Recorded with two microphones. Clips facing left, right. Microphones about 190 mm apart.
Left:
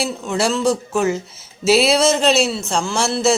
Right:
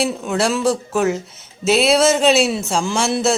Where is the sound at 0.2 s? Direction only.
Centre (ahead or behind).